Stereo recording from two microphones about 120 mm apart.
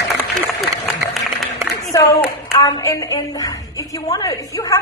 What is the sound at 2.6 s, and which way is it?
A woman's voice, 30° left (ahead or behind).